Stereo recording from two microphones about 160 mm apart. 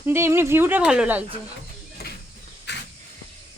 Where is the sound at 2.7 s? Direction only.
90° left.